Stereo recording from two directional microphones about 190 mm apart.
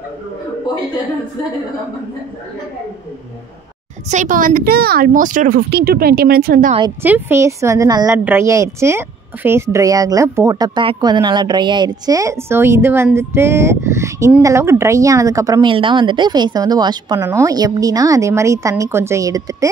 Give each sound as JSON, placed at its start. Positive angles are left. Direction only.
{"t": 4.1, "sound": "a woman's voice", "side_deg": -45}
{"t": 7.0, "sound": "a woman's voice", "side_deg": -10}